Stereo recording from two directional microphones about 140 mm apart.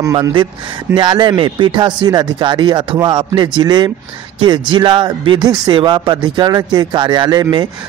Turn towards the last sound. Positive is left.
turn(degrees=-30)  # may be behind; listen again after turning